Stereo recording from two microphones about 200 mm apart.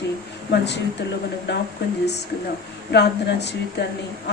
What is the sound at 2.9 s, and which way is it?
Speech, 60° left (ahead or behind).